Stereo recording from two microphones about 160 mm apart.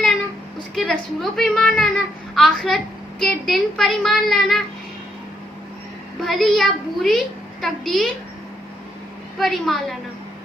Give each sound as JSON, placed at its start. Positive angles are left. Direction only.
{"t": 0.8, "sound": "a child's voice", "side_deg": 5}
{"t": 6.2, "sound": "a child's voice", "side_deg": 0}
{"t": 9.4, "sound": "a child's voice", "side_deg": 0}